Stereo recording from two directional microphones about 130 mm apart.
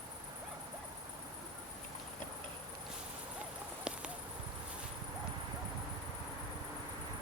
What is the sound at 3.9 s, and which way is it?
Clip-clop, 5° right (ahead or behind).